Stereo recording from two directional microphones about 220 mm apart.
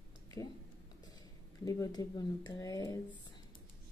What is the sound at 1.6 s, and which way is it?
Speech, 15° left (ahead or behind).